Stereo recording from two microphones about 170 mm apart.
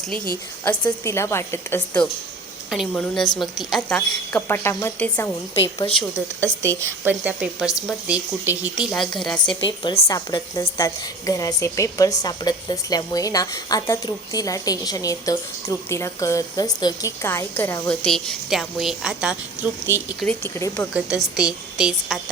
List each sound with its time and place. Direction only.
0.6 s a woman's voice: 10° left (ahead or behind)
2.6 s a woman's voice: centre (ahead or behind)
6.7 s a woman's voice: 15° right (ahead or behind); by 9.6 s 5° left (ahead or behind)
9.6 s a woman's voice: 25° left (ahead or behind); by 19.8 s 10° right (ahead or behind)
20.2 s a woman's voice: 15° left (ahead or behind)
20.9 s a woman's voice: 5° right (ahead or behind)